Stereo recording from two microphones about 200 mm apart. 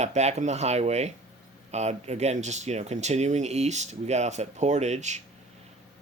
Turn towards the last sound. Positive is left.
turn(degrees=-35)  # may be behind; listen again after turning